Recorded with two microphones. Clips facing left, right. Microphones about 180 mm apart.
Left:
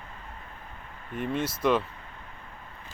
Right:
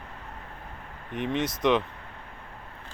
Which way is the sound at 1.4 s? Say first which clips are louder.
Right 1 dB; 5° left (ahead or behind).